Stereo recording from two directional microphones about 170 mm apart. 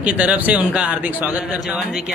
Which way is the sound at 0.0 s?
10° right (ahead or behind).